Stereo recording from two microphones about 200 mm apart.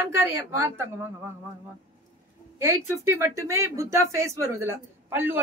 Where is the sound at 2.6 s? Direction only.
15° right (ahead or behind).